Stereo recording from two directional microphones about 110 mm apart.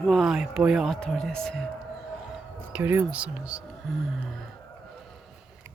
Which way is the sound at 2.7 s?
20° right (ahead or behind).